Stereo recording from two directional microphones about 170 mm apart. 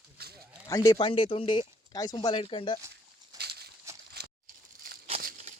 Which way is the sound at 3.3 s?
75° right (ahead or behind).